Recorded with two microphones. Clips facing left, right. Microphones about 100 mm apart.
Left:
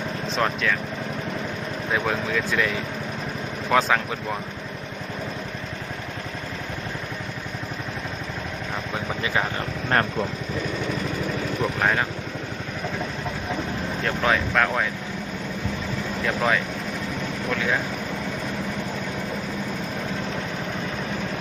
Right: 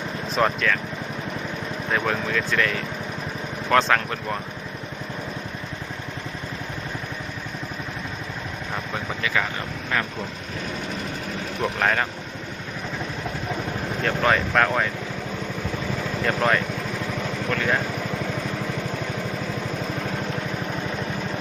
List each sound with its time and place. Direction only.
0.3 s speech: centre (ahead or behind)
1.9 s speech: 10° left (ahead or behind)
9.9 s speech: 45° left (ahead or behind)
11.6 s speech: 5° left (ahead or behind)
14.0 s speech: centre (ahead or behind)
16.2 s speech: centre (ahead or behind)